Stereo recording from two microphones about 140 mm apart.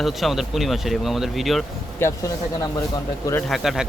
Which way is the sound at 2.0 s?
25° left (ahead or behind).